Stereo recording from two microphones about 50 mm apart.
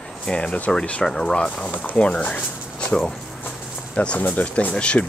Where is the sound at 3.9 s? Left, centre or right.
Left.